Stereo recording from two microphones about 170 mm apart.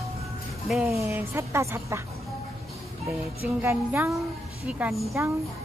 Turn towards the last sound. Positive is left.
turn(degrees=-15)  # may be behind; listen again after turning